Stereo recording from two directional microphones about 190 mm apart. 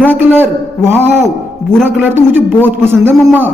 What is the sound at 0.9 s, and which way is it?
A man's voice, 10° right (ahead or behind).